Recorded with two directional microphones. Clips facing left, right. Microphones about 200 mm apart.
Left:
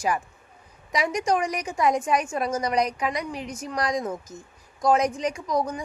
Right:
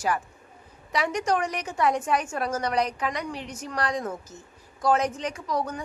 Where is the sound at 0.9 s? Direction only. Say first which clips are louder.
Left 1 dB; 10° left (ahead or behind).